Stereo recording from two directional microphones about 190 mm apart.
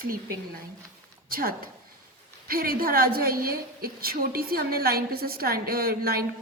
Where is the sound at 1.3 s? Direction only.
50° right (ahead or behind).